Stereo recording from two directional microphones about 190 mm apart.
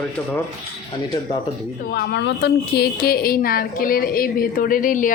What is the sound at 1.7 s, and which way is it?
A woman's voice, 60° left (ahead or behind).